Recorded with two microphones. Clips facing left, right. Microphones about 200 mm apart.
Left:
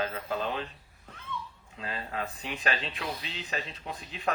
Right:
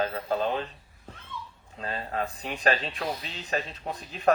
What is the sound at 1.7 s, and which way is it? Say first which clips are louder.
Speech: right 4 dB; 40° right (ahead or behind).